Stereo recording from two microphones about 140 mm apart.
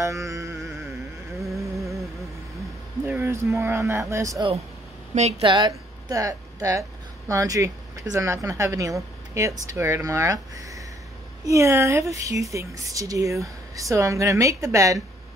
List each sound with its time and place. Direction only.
0.0 s speech: 20° right (ahead or behind)
1.4 s a sound: 20° right (ahead or behind)
3.1 s speech: 15° right (ahead or behind)
5.4 s a woman's voice: 35° right (ahead or behind)
5.7 s speech: 25° right (ahead or behind)